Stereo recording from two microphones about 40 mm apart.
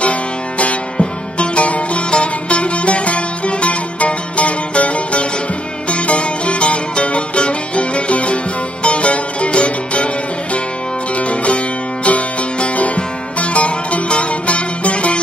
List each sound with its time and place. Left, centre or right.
0.0 s music: left